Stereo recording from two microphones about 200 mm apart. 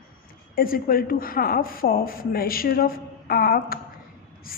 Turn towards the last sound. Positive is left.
turn(degrees=45)  # may be behind; listen again after turning